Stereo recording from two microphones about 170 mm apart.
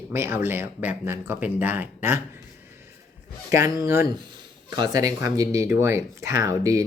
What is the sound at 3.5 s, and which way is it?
Speech, 15° right (ahead or behind).